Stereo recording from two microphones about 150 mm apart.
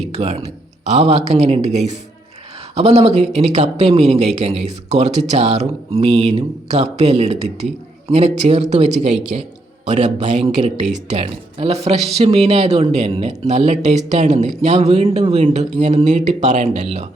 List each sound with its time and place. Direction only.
0.0 s speech: 45° right (ahead or behind)